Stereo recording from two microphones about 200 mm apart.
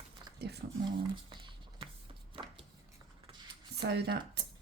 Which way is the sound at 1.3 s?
25° right (ahead or behind).